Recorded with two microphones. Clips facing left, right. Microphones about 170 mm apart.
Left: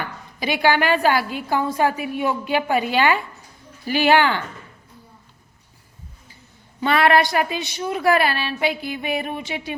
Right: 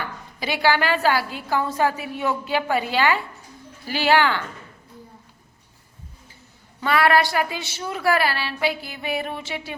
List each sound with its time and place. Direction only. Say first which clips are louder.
0.3 s a woman's voice: left 2 dB; 15° left (ahead or behind)
6.7 s a woman's voice: left 2 dB; 20° left (ahead or behind)